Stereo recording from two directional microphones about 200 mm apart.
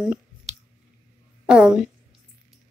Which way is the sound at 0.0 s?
5° right (ahead or behind).